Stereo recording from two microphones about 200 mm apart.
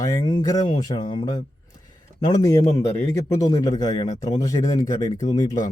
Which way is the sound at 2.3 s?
15° left (ahead or behind).